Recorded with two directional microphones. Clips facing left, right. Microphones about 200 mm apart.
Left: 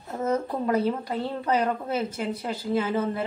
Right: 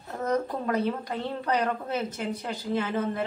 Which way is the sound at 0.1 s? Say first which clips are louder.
Left 1 dB; 5° left (ahead or behind).